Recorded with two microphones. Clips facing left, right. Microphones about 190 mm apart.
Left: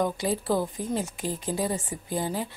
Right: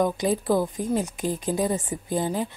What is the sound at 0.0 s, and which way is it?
A woman's voice, 15° right (ahead or behind).